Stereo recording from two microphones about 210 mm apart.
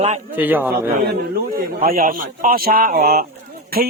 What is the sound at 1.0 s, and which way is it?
A man's voice, 45° right (ahead or behind).